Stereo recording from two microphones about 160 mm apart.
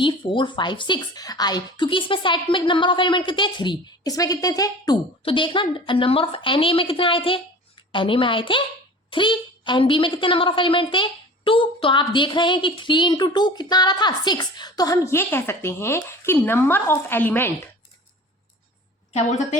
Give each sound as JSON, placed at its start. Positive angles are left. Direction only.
{"t": 0.0, "sound": "a woman's voice", "side_deg": 30}
{"t": 19.1, "sound": "a woman's voice", "side_deg": 45}